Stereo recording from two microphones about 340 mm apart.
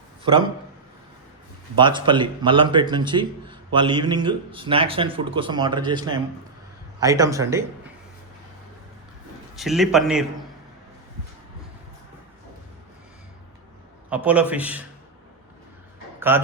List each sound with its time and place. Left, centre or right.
1.8 s a man's voice: centre
9.6 s a man's voice: centre
14.1 s a man's voice: centre
16.3 s a man's voice: centre